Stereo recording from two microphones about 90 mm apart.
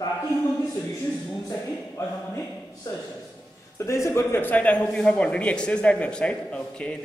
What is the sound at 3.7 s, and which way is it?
A man's voice, 30° left (ahead or behind).